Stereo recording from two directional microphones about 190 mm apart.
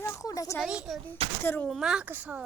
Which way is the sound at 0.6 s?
5° right (ahead or behind).